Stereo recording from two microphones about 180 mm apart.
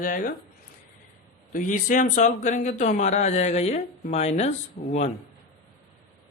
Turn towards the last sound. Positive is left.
turn(degrees=40)  # may be behind; listen again after turning